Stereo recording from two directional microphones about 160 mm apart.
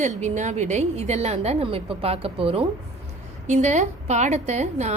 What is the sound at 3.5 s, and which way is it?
A woman's voice, 45° right (ahead or behind).